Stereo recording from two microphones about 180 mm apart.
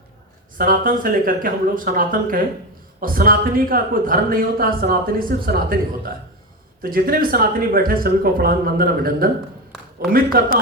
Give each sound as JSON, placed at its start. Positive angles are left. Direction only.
{"t": 0.6, "sound": "speech", "side_deg": -50}
{"t": 6.8, "sound": "speech", "side_deg": -55}
{"t": 10.3, "sound": "speech", "side_deg": -60}